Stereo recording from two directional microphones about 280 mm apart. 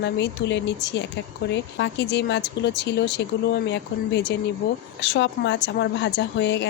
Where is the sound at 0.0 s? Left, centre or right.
Left.